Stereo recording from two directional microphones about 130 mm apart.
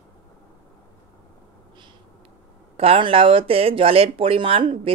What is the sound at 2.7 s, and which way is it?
Speech, 45° right (ahead or behind).